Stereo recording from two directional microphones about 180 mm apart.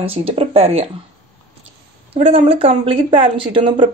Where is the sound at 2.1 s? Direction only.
35° right (ahead or behind).